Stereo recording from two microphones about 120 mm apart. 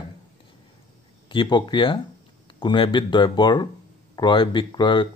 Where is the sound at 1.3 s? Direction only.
40° left (ahead or behind).